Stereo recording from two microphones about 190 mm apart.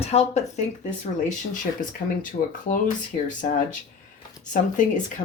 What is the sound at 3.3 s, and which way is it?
Speech, 45° left (ahead or behind).